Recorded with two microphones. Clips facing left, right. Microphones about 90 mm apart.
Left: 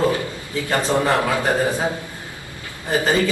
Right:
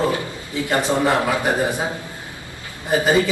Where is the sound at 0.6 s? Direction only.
20° right (ahead or behind).